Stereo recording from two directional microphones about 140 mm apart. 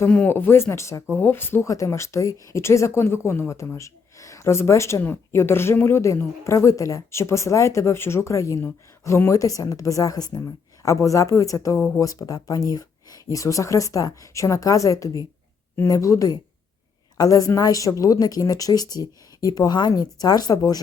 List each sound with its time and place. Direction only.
0.0 s speech: 10° left (ahead or behind); by 20.7 s 30° left (ahead or behind)